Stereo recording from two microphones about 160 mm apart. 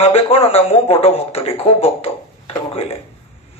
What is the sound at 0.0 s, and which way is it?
A man's voice, 35° left (ahead or behind).